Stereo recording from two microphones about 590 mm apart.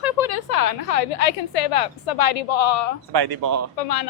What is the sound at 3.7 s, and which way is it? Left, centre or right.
Speech, left.